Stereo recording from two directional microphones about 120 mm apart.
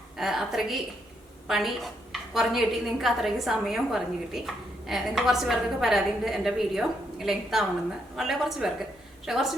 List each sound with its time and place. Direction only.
0.2 s a woman's voice: centre (ahead or behind)